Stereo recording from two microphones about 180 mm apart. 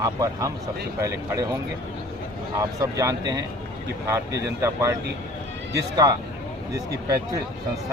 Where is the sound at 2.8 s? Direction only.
20° right (ahead or behind).